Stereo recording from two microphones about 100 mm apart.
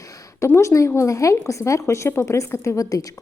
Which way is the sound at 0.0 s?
35° left (ahead or behind).